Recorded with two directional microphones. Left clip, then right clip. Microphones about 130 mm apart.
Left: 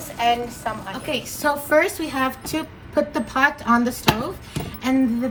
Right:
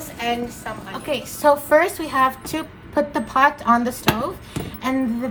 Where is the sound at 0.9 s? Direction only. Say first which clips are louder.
Right 1 dB; 50° right (ahead or behind).